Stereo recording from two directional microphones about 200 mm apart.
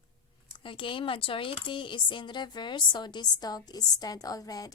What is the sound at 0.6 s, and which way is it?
A woman's voice, 25° left (ahead or behind).